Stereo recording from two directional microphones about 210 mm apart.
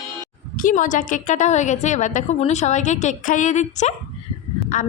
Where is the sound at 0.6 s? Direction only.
40° left (ahead or behind).